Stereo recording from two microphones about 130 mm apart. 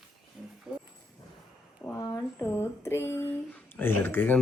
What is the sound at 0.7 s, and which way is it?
Clip-clop, 5° right (ahead or behind).